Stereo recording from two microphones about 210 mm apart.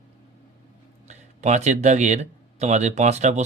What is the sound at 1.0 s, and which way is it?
Speech, 35° right (ahead or behind).